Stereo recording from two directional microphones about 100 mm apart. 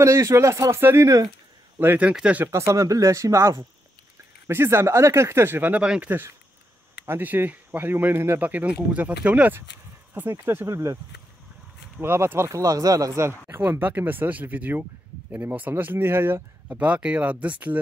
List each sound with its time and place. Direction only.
0.0 s speech: 30° right (ahead or behind)
1.8 s speech: 25° right (ahead or behind)
2.0 s speech: 10° right (ahead or behind)
2.4 s speech: 30° right (ahead or behind); by 6.1 s 10° right (ahead or behind)
7.1 s speech: 20° right (ahead or behind)
12.0 s speech: 25° right (ahead or behind)
13.5 s speech: 20° right (ahead or behind)